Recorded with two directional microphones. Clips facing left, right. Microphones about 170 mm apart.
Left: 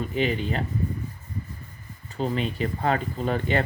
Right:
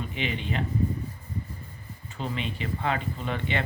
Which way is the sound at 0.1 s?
40° left (ahead or behind).